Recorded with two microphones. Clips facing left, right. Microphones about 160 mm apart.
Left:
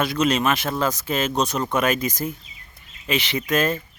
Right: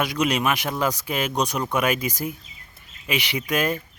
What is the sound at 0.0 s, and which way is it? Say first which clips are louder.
Speech: left 2 dB; 15° right (ahead or behind).